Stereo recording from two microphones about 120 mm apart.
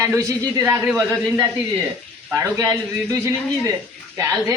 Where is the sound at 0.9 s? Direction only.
Centre (ahead or behind).